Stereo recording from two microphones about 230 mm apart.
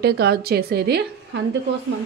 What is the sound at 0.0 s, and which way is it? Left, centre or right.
A woman's voice, right.